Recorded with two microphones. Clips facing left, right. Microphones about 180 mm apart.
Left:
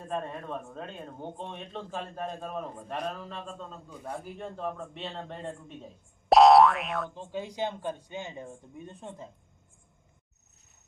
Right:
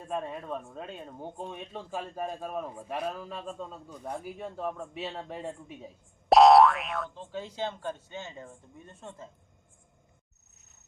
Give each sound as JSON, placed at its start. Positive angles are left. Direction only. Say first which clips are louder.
{"t": 0.1, "sound": "a man's voice", "louder": "even", "side_deg": -5}
{"t": 7.1, "sound": "speech", "louder": "left 2 dB", "side_deg": 15}